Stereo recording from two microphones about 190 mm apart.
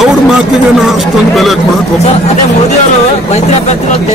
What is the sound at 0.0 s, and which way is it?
Speech, centre (ahead or behind).